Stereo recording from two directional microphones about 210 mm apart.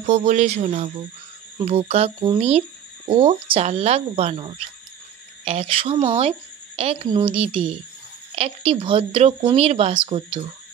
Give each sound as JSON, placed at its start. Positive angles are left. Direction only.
{"t": 0.0, "sound": "speech", "side_deg": -30}